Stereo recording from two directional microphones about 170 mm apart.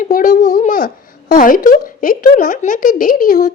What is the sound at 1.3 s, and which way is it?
A woman's voice, 55° left (ahead or behind).